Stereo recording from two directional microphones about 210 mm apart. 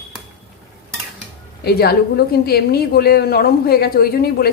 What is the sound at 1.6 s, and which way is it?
A woman's voice, 50° left (ahead or behind).